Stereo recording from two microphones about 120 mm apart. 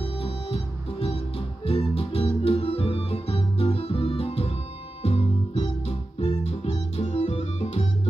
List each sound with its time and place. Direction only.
1.7 s music: 55° left (ahead or behind)